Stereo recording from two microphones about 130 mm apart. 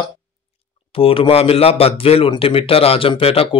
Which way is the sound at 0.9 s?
45° left (ahead or behind).